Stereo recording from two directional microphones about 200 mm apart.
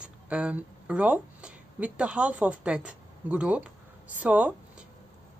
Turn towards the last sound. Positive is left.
turn(degrees=-5)  # may be behind; listen again after turning